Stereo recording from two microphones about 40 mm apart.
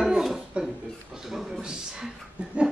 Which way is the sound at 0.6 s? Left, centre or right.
Right.